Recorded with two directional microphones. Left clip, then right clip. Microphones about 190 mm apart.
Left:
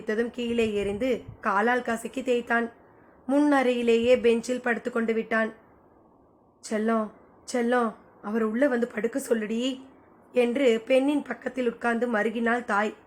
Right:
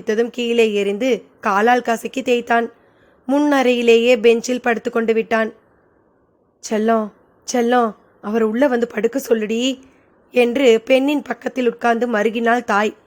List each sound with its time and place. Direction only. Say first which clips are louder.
0.0 s a woman's voice: right 9 dB; 45° right (ahead or behind)
6.6 s a woman's voice: right 9 dB; 50° right (ahead or behind)